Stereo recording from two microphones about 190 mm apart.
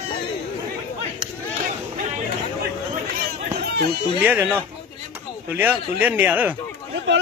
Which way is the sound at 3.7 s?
55° right (ahead or behind).